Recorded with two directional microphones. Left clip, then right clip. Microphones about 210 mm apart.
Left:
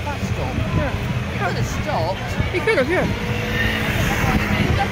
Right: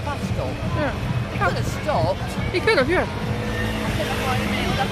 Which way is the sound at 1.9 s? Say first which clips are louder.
Right 1 dB; 55° right (ahead or behind).